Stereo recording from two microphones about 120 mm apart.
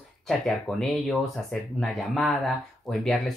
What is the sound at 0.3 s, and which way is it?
Speech, centre (ahead or behind).